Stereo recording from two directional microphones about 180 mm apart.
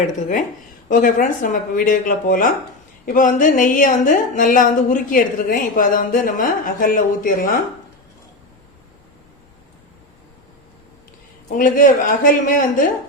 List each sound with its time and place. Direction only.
0.0 s a woman's voice: 45° left (ahead or behind)
11.4 s a woman's voice: 50° left (ahead or behind)